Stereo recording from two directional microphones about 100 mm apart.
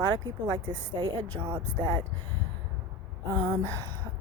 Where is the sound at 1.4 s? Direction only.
60° right (ahead or behind).